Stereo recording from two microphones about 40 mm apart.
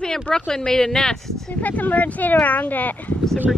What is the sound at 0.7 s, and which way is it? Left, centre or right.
Speech, left.